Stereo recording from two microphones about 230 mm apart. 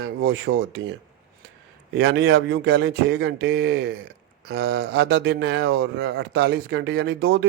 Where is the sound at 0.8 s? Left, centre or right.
Right.